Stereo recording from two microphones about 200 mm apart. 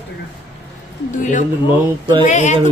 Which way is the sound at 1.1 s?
40° left (ahead or behind).